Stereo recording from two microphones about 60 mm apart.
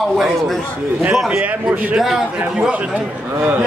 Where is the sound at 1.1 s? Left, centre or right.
Centre.